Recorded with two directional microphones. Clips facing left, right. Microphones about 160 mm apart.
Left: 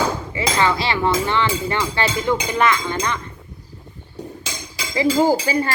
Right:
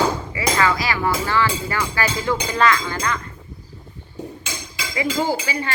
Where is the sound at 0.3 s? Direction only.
25° left (ahead or behind).